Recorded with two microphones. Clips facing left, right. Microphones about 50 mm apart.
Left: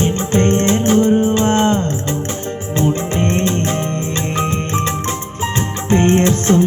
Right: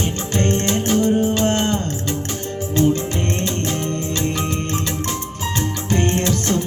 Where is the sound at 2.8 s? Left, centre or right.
Left.